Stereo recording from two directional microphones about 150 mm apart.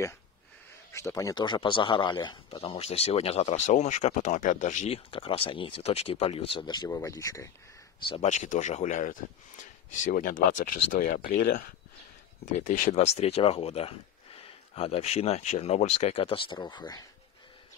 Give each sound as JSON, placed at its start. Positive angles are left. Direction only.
{"t": 0.9, "sound": "speech", "side_deg": 20}
{"t": 4.9, "sound": "speech", "side_deg": 40}
{"t": 8.1, "sound": "speech", "side_deg": 50}
{"t": 12.6, "sound": "speech", "side_deg": 65}